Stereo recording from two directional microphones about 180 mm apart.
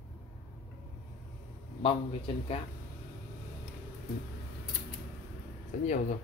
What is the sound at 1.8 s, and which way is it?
Speech, 30° left (ahead or behind).